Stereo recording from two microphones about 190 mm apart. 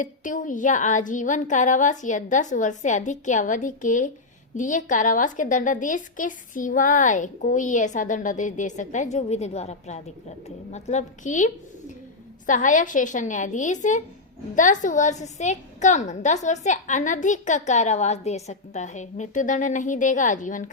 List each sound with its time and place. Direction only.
0.0 s a woman's voice: 45° left (ahead or behind)